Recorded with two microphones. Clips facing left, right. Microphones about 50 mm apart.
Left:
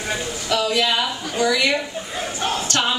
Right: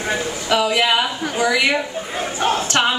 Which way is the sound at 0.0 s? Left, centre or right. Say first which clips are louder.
Right 4 dB; right.